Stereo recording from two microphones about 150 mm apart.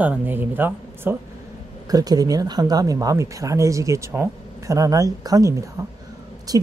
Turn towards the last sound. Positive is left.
turn(degrees=-25)  # may be behind; listen again after turning